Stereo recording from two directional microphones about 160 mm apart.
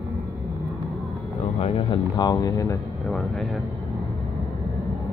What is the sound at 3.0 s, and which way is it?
Speech, 5° left (ahead or behind).